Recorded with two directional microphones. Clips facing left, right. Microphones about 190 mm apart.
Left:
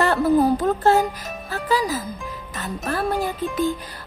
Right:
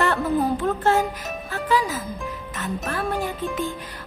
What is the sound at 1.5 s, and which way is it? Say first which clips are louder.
Speech: left 1 dB; 35° left (ahead or behind).